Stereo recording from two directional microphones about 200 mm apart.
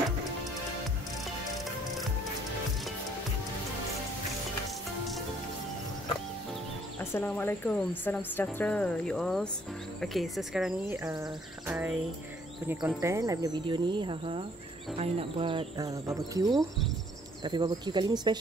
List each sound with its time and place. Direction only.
7.0 s a woman's voice: 10° left (ahead or behind)
11.6 s music: 5° right (ahead or behind)
12.6 s speech: 10° right (ahead or behind)
15.9 s speech: 15° right (ahead or behind)
16.4 s speech: centre (ahead or behind)
17.4 s speech: 20° right (ahead or behind)